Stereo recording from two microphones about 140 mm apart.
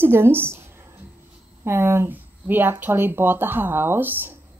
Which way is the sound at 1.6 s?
20° right (ahead or behind).